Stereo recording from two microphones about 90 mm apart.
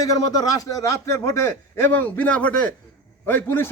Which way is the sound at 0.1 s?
45° left (ahead or behind).